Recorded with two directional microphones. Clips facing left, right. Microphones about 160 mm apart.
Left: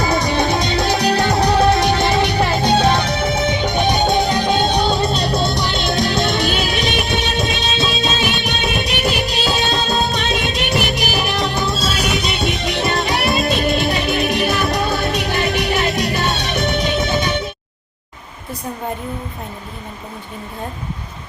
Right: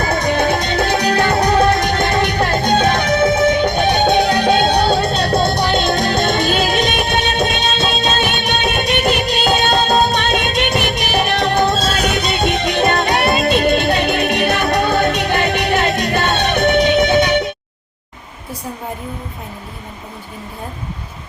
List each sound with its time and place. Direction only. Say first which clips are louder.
0.2 s music: right 1 dB; 55° right (ahead or behind)